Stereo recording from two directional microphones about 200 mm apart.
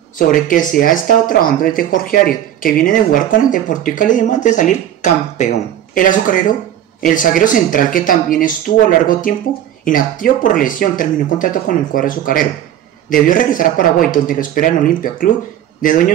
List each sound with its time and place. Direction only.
0.3 s speech: 45° left (ahead or behind)